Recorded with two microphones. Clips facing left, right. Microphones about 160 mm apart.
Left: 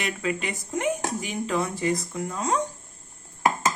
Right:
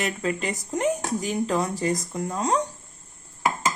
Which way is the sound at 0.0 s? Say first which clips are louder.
Right 2 dB; 40° right (ahead or behind).